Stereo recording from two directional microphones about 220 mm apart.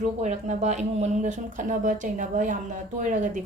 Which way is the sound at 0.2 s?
30° right (ahead or behind).